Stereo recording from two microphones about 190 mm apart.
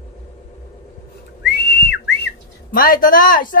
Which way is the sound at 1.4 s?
65° left (ahead or behind).